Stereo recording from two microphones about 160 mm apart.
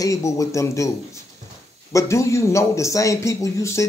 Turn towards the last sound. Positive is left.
turn(degrees=20)  # may be behind; listen again after turning